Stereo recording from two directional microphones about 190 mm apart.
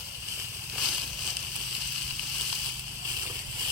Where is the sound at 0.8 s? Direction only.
Centre (ahead or behind).